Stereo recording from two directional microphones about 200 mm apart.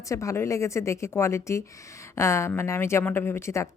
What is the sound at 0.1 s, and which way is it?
Speech, 15° left (ahead or behind).